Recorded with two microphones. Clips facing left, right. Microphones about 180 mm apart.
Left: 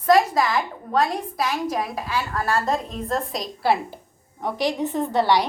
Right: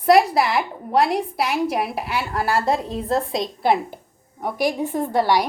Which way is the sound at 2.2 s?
30° right (ahead or behind).